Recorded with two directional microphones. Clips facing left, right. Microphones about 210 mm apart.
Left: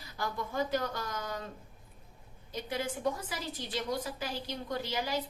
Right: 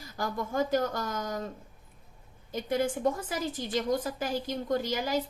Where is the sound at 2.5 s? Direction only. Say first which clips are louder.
Right 7 dB; 50° right (ahead or behind).